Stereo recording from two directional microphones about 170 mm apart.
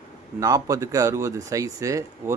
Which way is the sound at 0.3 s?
20° right (ahead or behind).